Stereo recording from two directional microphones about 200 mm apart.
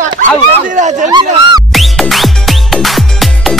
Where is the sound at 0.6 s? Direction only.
40° right (ahead or behind).